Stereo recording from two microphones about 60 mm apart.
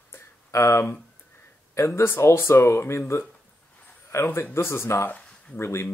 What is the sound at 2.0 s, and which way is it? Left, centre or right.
Speech, left.